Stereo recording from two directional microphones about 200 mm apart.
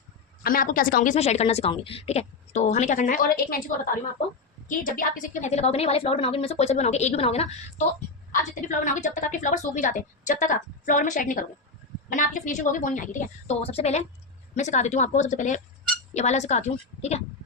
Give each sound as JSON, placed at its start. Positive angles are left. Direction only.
{"t": 0.4, "sound": "a woman's voice", "side_deg": 45}
{"t": 4.8, "sound": "a woman's voice", "side_deg": 45}